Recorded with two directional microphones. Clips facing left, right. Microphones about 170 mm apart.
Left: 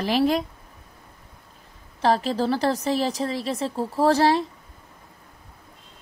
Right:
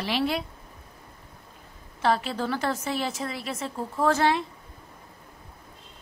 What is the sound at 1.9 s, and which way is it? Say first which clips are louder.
A woman's voice: left 4 dB; 35° left (ahead or behind).